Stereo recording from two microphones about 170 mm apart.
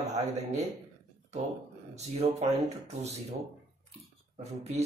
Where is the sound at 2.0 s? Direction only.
40° right (ahead or behind).